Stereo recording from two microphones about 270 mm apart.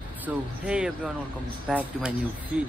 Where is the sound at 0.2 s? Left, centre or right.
Centre.